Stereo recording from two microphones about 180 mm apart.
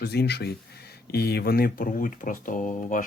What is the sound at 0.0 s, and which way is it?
Speech, 60° left (ahead or behind).